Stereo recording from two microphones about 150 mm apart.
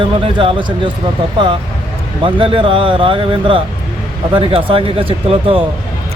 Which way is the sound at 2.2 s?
35° right (ahead or behind).